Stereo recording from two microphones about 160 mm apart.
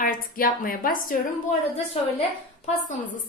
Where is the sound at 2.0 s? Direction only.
40° left (ahead or behind).